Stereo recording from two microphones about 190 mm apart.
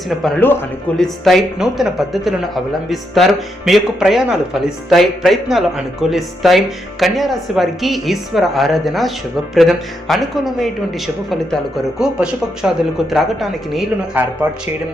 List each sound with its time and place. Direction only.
0.1 s speech: centre (ahead or behind)